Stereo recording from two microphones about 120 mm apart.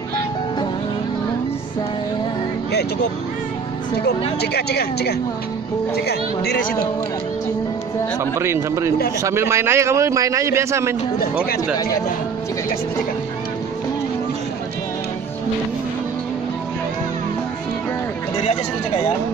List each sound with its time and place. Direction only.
8.2 s a man's voice: 20° right (ahead or behind)